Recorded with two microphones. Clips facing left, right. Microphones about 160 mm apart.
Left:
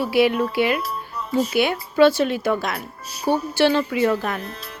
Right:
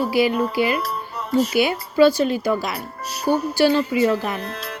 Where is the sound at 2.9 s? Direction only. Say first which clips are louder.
Right 2 dB; 75° right (ahead or behind).